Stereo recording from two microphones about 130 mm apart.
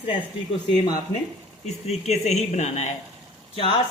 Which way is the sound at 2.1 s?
60° left (ahead or behind).